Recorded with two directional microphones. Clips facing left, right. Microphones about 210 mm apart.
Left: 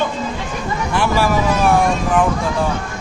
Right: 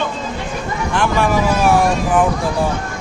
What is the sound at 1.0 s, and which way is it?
Speech, 5° left (ahead or behind).